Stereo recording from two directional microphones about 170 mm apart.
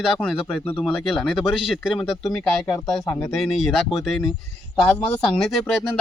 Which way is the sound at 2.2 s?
15° left (ahead or behind).